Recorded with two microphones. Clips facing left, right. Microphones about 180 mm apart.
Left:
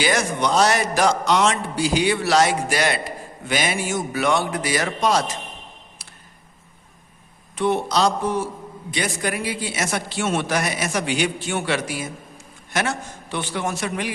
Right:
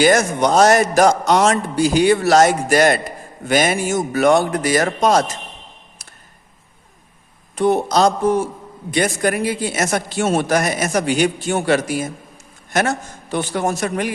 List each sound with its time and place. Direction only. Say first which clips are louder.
0.0 s a man's voice: right 7 dB; 45° right (ahead or behind)
7.5 s a man's voice: right 5 dB; 40° right (ahead or behind)